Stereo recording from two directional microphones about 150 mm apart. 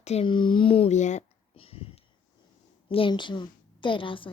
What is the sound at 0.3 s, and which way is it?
A woman's voice, 30° left (ahead or behind).